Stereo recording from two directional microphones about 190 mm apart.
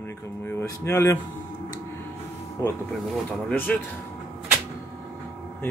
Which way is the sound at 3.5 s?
5° left (ahead or behind).